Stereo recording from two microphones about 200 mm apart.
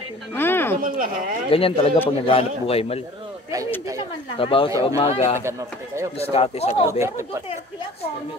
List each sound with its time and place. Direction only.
0.3 s a sound: 10° left (ahead or behind)
0.7 s speech: 45° right (ahead or behind)
1.5 s a man's voice: 30° left (ahead or behind)
4.4 s a man's voice: 25° left (ahead or behind)
5.4 s speech: 15° right (ahead or behind)
6.3 s speech: 30° left (ahead or behind)
6.9 s speech: 15° right (ahead or behind)